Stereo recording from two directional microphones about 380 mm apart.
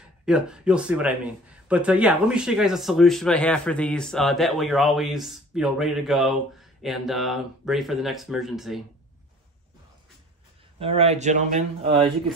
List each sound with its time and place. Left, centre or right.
0.2 s a man's voice: centre
10.8 s speech: centre